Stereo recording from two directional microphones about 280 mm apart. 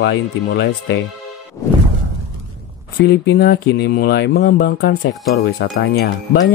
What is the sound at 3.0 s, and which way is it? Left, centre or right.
Speech, left.